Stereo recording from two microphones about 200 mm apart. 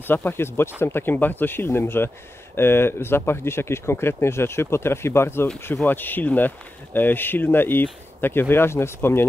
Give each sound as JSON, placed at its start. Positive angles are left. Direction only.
{"t": 0.0, "sound": "speech", "side_deg": 10}